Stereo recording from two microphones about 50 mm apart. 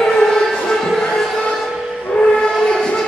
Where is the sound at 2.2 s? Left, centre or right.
Centre.